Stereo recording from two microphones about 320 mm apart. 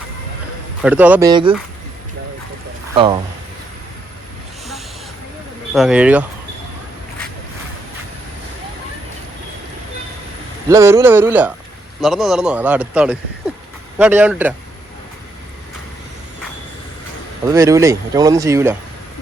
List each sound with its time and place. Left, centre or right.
0.8 s a man's voice: centre
2.9 s speech: centre
5.7 s a man's voice: centre
10.7 s a man's voice: centre
17.5 s speech: centre